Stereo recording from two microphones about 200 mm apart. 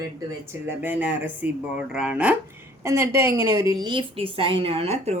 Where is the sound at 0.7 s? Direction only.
10° right (ahead or behind).